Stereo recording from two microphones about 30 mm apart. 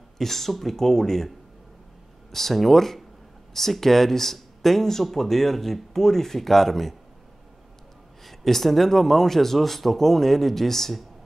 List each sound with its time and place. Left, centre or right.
0.2 s a man's voice: centre
2.3 s a man's voice: centre
8.3 s a man's voice: centre